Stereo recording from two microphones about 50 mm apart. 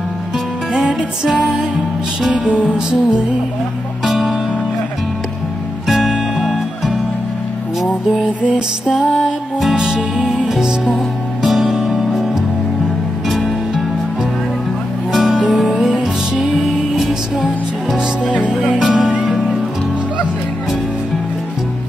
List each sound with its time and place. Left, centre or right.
1.2 s music: centre
4.0 s music: centre
5.9 s music: centre
8.2 s music: centre
9.2 s music: centre
9.8 s music: centre
15.1 s music: centre